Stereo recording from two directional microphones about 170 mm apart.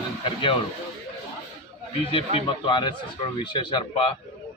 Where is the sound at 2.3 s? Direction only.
25° left (ahead or behind).